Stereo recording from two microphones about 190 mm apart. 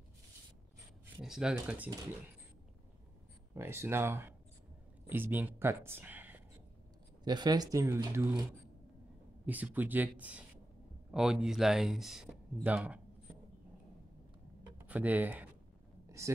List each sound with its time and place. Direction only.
1.2 s speech: 5° right (ahead or behind)
3.5 s speech: 15° right (ahead or behind)
7.2 s speech: 20° right (ahead or behind)
9.5 s speech: 10° right (ahead or behind)
14.9 s speech: 10° right (ahead or behind)
16.1 s a sound: 15° right (ahead or behind)